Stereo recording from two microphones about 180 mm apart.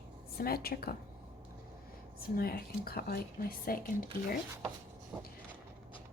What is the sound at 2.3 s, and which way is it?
Speech, 55° left (ahead or behind).